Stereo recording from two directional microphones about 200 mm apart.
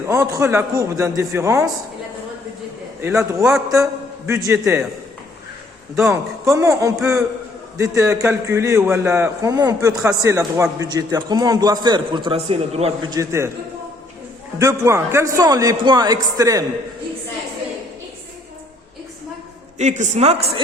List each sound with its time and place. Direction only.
0.1 s a man's voice: 15° right (ahead or behind)
3.0 s a man's voice: 15° right (ahead or behind)
6.1 s a man's voice: 15° right (ahead or behind)
14.6 s a man's voice: 15° right (ahead or behind)
19.8 s a woman's voice: 35° right (ahead or behind)